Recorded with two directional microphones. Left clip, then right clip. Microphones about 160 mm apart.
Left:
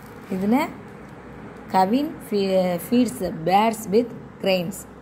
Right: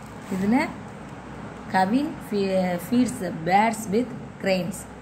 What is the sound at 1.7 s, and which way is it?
A woman's voice, 35° left (ahead or behind).